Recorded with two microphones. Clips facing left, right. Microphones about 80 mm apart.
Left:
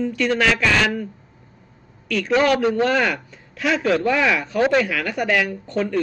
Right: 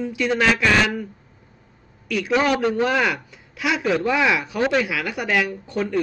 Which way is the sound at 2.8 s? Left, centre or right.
Centre.